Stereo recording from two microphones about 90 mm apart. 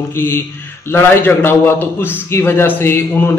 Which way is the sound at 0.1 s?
25° left (ahead or behind).